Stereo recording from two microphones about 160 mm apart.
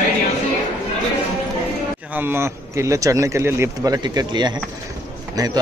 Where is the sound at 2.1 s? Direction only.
15° right (ahead or behind).